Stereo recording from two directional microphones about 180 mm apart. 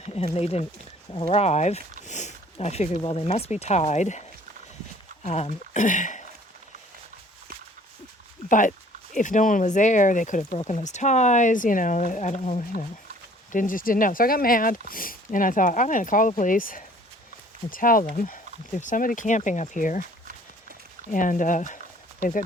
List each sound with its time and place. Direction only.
0.0 s a sound: 35° left (ahead or behind)
0.3 s speech: 35° left (ahead or behind)
8.4 s speech: 45° left (ahead or behind)
21.1 s speech: 50° left (ahead or behind)